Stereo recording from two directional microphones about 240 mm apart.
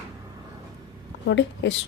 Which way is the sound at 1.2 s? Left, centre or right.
Left.